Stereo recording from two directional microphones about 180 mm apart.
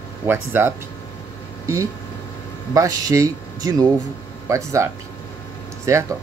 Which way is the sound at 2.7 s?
20° right (ahead or behind).